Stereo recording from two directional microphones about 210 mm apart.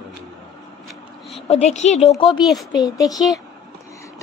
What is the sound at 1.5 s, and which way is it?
Speech, 30° left (ahead or behind).